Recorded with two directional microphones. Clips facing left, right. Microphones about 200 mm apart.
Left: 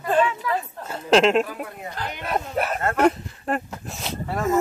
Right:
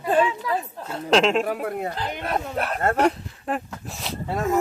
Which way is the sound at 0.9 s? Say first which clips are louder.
Left 2 dB; centre (ahead or behind).